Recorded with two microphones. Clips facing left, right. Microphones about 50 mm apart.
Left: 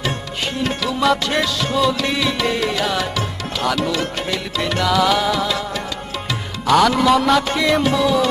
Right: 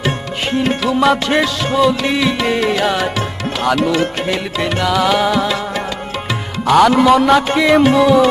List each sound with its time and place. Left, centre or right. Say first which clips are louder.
0.6 s music: right 5 dB; right
6.7 s music: right 4 dB; right